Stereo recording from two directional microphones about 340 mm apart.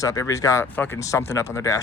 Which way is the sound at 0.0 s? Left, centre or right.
Centre.